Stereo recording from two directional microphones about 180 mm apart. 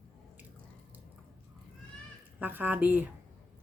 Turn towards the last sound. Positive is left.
turn(degrees=-10)  # may be behind; listen again after turning